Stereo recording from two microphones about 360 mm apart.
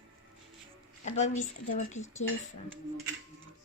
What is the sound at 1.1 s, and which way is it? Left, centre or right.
Female singing, centre.